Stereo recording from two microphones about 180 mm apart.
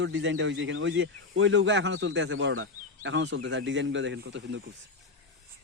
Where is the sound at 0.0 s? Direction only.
80° right.